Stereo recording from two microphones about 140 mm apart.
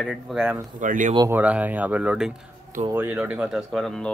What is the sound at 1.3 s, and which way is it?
Speech, 10° right (ahead or behind).